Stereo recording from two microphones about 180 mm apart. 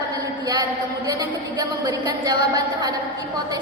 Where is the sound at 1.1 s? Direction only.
20° right (ahead or behind).